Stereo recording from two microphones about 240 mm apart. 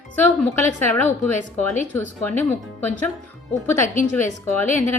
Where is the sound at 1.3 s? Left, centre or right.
Left.